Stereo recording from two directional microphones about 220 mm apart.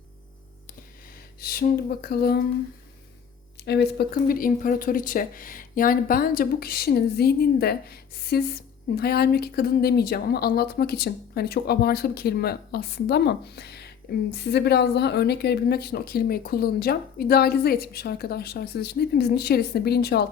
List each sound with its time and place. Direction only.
1.4 s speech: 45° left (ahead or behind)
3.6 s speech: 50° left (ahead or behind)